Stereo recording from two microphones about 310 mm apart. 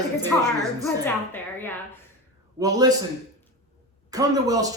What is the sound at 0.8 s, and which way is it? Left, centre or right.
Speech, centre.